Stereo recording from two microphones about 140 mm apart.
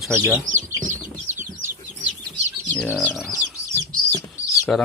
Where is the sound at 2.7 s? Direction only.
10° left (ahead or behind).